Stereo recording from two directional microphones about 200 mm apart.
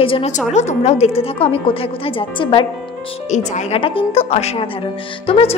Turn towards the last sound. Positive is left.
turn(degrees=30)  # may be behind; listen again after turning